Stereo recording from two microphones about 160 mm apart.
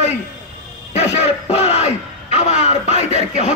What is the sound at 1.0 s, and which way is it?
Music, 40° left (ahead or behind).